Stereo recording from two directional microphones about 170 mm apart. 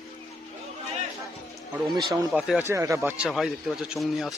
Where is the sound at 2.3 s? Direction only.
Centre (ahead or behind).